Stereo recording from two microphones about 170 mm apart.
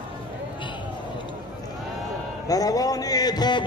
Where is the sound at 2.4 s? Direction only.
20° left (ahead or behind).